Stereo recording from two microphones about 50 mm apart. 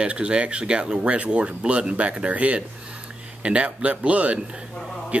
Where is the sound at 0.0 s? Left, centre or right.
Right.